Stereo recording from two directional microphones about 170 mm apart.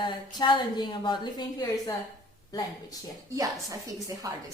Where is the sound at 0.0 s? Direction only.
25° left (ahead or behind).